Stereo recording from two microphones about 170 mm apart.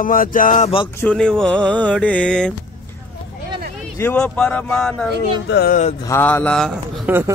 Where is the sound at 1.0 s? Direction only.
5° left (ahead or behind).